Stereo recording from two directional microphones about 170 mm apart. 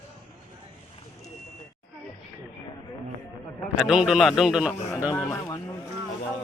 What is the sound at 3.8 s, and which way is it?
Speech, 5° right (ahead or behind).